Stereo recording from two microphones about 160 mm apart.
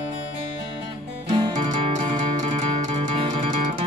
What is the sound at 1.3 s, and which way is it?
Music, 30° right (ahead or behind).